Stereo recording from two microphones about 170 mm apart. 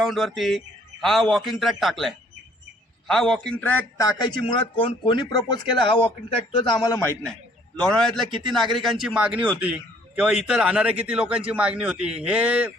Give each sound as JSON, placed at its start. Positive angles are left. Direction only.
{"t": 0.0, "sound": "a man's voice", "side_deg": 0}
{"t": 7.8, "sound": "a man's voice", "side_deg": 5}